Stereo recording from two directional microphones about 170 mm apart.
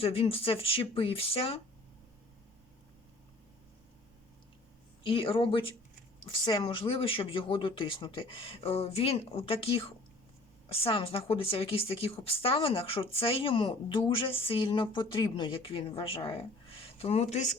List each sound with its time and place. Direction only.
0.0 s a woman's voice: 35° left (ahead or behind)
5.0 s a woman's voice: 30° left (ahead or behind)